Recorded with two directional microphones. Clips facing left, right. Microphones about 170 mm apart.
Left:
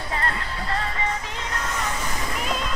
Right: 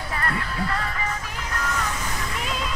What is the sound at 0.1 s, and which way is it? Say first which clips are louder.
Music: even; 25° left (ahead or behind).